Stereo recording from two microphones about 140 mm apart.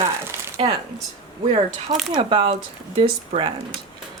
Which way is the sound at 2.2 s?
40° right (ahead or behind).